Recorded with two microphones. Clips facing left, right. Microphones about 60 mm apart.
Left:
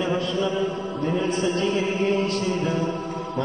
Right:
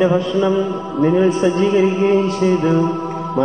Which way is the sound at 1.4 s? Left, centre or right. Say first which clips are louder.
Right 9 dB; right.